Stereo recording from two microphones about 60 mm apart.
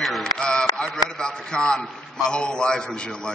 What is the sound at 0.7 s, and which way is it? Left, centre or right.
A man's voice, centre.